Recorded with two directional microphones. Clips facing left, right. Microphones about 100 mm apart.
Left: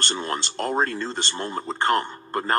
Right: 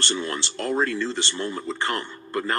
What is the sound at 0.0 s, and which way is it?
Speech, 40° left (ahead or behind).